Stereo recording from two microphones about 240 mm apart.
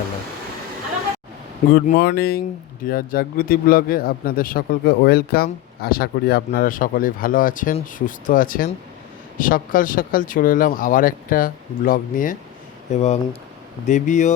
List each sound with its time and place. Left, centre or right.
1.7 s speech: left